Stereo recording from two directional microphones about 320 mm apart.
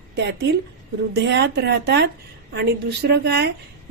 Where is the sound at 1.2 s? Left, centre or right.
Right.